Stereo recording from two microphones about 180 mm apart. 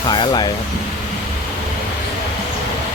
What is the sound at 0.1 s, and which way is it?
Speech, 25° left (ahead or behind).